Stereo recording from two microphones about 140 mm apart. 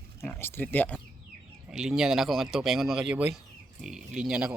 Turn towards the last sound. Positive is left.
turn(degrees=-5)  # may be behind; listen again after turning